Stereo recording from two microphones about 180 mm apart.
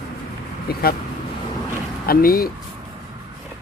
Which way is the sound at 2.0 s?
55° left (ahead or behind).